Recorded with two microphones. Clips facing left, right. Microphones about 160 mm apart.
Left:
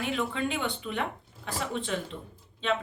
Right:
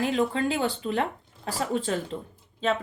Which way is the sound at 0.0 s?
35° right (ahead or behind).